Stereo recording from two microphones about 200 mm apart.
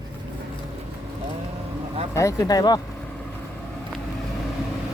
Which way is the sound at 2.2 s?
15° left (ahead or behind).